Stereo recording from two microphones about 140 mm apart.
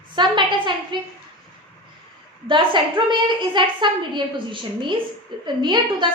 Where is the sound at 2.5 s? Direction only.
35° right (ahead or behind).